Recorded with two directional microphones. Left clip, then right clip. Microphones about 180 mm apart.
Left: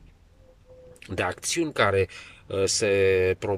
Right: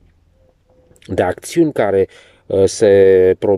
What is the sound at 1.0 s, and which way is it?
Speech, 40° right (ahead or behind).